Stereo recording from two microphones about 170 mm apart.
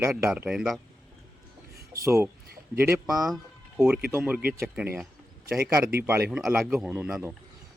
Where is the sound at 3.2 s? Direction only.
5° right (ahead or behind).